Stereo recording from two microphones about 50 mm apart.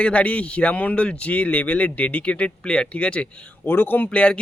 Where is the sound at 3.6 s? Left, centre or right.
Left.